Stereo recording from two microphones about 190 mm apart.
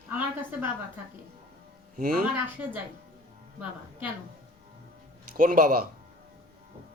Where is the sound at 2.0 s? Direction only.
50° right (ahead or behind).